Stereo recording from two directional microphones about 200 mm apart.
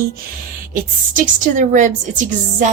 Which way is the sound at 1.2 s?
40° right (ahead or behind).